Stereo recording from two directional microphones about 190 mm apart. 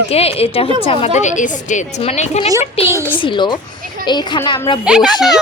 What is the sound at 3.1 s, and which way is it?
Speech, 25° left (ahead or behind).